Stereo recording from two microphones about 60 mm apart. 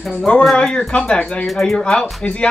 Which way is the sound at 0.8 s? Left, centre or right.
Centre.